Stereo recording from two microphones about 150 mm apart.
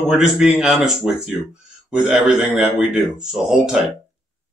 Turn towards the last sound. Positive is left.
turn(degrees=-5)  # may be behind; listen again after turning